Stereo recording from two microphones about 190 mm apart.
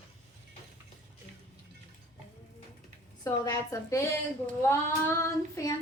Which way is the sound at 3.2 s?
15° left (ahead or behind).